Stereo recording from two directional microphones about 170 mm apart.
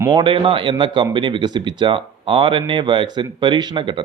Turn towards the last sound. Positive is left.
turn(degrees=-30)  # may be behind; listen again after turning